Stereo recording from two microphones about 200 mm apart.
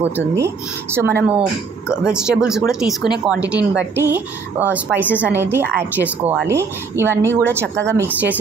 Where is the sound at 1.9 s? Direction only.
5° right (ahead or behind).